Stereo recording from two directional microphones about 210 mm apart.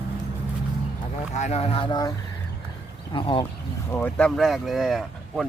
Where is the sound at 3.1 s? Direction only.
20° left (ahead or behind).